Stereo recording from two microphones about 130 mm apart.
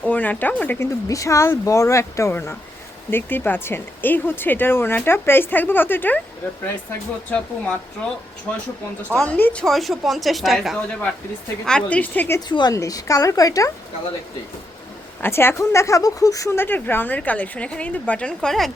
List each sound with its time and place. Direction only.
0.0 s speech: 10° left (ahead or behind)
1.0 s speech: 25° left (ahead or behind)
7.3 s speech: 10° left (ahead or behind)
12.5 s speech: 35° left (ahead or behind)
15.2 s speech: 20° left (ahead or behind)